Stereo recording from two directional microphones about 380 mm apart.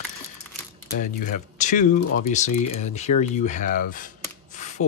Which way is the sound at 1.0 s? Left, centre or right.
Centre.